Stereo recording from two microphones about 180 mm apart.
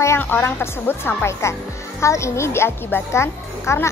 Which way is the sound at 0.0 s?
15° left (ahead or behind).